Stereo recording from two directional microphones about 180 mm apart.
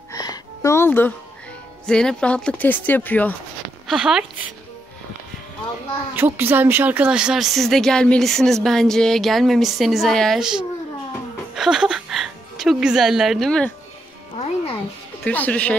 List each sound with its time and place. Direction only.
0.1 s music: 20° left (ahead or behind)
1.9 s speech: 5° left (ahead or behind)
3.8 s speech: 5° right (ahead or behind)
6.1 s a woman's voice: 10° right (ahead or behind)
14.3 s music: 35° left (ahead or behind)
15.2 s speech: 10° left (ahead or behind)